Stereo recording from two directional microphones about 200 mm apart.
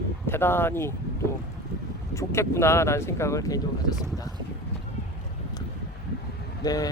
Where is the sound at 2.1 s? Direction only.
15° left (ahead or behind).